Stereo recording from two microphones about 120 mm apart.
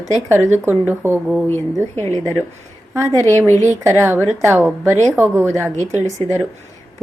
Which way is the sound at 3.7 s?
20° right (ahead or behind).